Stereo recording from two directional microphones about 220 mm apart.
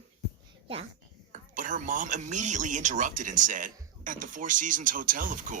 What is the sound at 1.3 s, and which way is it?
Speech, 35° right (ahead or behind).